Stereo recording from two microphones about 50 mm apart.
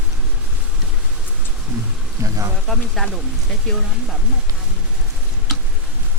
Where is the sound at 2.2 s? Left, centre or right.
Right.